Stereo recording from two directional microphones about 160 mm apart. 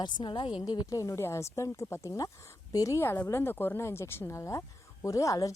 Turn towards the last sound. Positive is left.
turn(degrees=20)  # may be behind; listen again after turning